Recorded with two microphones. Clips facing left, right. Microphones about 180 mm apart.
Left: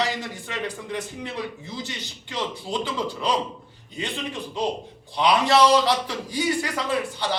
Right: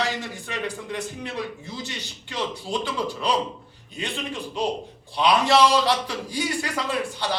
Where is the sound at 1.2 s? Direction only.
15° left (ahead or behind).